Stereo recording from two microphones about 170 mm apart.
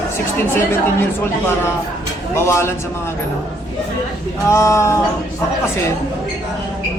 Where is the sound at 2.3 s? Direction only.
15° left (ahead or behind).